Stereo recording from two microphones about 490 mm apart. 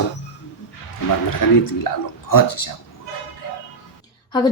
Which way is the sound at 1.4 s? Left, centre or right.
Left.